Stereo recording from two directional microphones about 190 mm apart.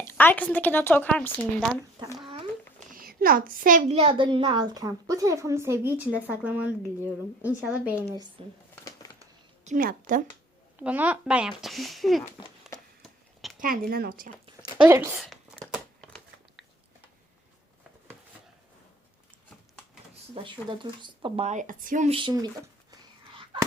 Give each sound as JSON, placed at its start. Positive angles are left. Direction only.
{"t": 0.0, "sound": "a woman's voice", "side_deg": 10}
{"t": 2.0, "sound": "a child's voice", "side_deg": -25}
{"t": 2.9, "sound": "a child's voice", "side_deg": -50}
{"t": 8.0, "sound": "a child's voice", "side_deg": -20}
{"t": 8.7, "sound": "a sound", "side_deg": 20}
{"t": 9.6, "sound": "speech", "side_deg": -45}
{"t": 10.8, "sound": "speech", "side_deg": -5}
{"t": 13.0, "sound": "a sound", "side_deg": 0}
{"t": 13.6, "sound": "a woman's voice", "side_deg": -50}
{"t": 14.8, "sound": "a woman's voice", "side_deg": -15}
{"t": 15.2, "sound": "a sound", "side_deg": 0}
{"t": 20.3, "sound": "a child's voice", "side_deg": -25}